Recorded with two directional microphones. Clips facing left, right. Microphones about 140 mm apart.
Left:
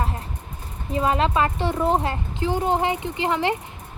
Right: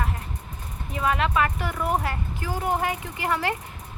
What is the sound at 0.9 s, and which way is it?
Speech, 30° left (ahead or behind).